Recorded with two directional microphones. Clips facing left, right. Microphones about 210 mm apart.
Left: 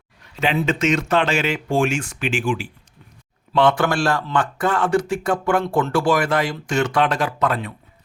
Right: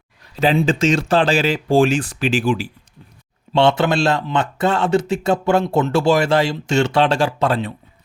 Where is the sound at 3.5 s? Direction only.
25° right (ahead or behind).